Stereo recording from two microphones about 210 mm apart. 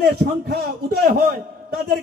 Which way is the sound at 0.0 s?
45° right (ahead or behind).